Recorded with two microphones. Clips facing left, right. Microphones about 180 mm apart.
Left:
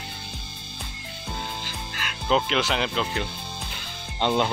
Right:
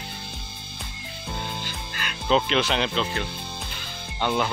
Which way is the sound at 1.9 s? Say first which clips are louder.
Right 1 dB; centre (ahead or behind).